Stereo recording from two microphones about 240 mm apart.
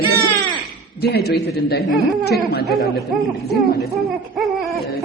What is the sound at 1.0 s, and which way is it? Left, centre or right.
Speech, left.